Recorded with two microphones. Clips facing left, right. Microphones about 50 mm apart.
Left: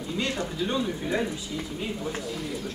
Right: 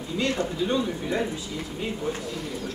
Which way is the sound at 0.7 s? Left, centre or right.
Centre.